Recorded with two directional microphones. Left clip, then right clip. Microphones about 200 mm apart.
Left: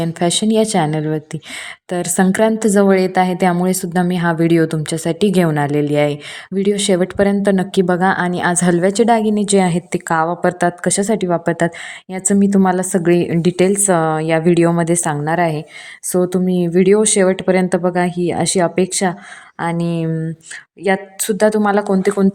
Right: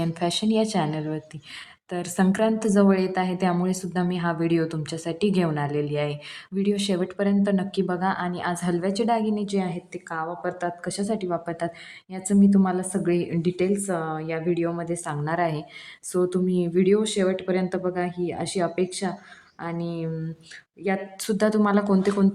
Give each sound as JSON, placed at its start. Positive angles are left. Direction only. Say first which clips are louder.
{"t": 0.0, "sound": "a woman's voice", "louder": "left 8 dB", "side_deg": 25}